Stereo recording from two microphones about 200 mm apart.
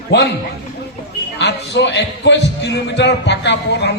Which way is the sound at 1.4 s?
60° left (ahead or behind).